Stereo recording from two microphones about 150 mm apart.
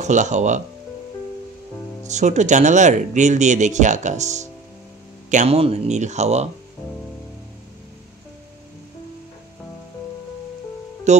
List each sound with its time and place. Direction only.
0.0 s speech: 50° right (ahead or behind)
2.0 s speech: 50° right (ahead or behind)
11.1 s speech: 50° right (ahead or behind)